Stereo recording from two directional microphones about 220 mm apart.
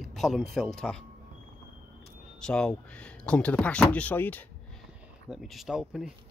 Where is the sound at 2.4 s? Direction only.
5° left (ahead or behind).